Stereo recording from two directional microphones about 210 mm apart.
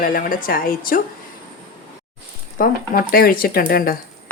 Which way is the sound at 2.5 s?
45° left (ahead or behind).